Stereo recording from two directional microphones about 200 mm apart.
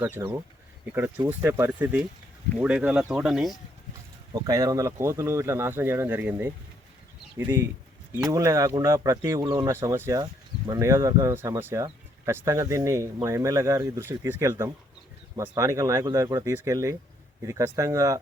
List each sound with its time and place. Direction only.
0.2 s speech: 10° right (ahead or behind)
4.4 s speech: 15° right (ahead or behind)